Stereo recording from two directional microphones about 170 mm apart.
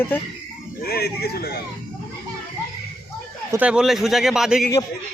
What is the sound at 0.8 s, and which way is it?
Speech, 65° left (ahead or behind).